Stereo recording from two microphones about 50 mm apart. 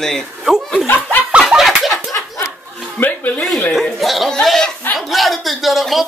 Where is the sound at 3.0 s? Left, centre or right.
Left.